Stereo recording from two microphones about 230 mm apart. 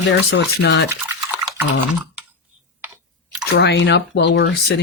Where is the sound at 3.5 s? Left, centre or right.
Left.